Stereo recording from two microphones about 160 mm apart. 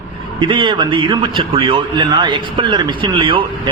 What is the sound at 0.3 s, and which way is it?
A man's voice, 30° right (ahead or behind).